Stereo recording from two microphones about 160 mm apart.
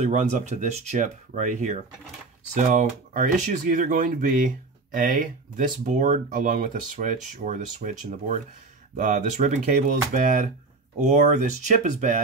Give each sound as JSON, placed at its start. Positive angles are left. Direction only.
{"t": 0.0, "sound": "speech", "side_deg": -45}